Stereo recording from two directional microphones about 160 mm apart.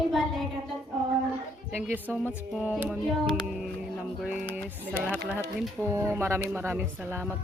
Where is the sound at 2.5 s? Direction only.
5° right (ahead or behind).